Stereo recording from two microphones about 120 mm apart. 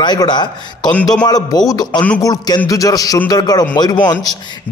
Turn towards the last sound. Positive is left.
turn(degrees=35)  # may be behind; listen again after turning